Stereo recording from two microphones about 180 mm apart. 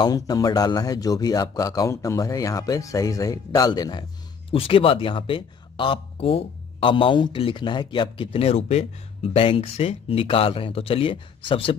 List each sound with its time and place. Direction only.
0.0 s a man's voice: 20° left (ahead or behind)